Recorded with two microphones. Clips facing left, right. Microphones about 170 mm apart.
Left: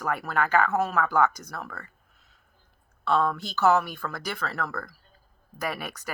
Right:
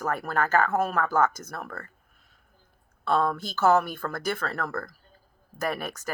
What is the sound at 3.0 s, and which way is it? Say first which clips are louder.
Speech: even; 45° right (ahead or behind).